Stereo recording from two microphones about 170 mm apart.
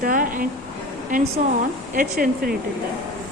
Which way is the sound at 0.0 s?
55° right (ahead or behind).